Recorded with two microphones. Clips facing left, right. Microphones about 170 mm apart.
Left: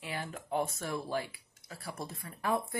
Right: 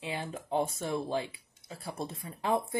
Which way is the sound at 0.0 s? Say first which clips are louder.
Right 3 dB; 20° right (ahead or behind).